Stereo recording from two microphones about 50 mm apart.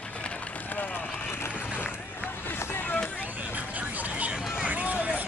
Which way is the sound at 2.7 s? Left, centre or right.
Left.